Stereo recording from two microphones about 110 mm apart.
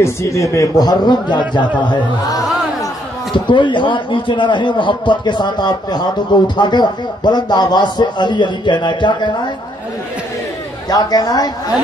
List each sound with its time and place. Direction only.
0.0 s a man's voice: 25° left (ahead or behind)
3.4 s a man's voice: 45° left (ahead or behind)
10.9 s a man's voice: 35° left (ahead or behind)